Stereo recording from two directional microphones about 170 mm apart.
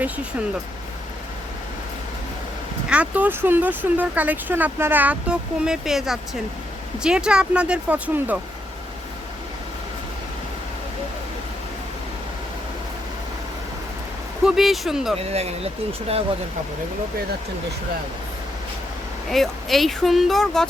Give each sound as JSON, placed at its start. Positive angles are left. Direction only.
{"t": 2.9, "sound": "speech", "side_deg": -10}
{"t": 14.4, "sound": "speech", "side_deg": 0}
{"t": 15.3, "sound": "speech", "side_deg": -40}
{"t": 19.3, "sound": "speech", "side_deg": 0}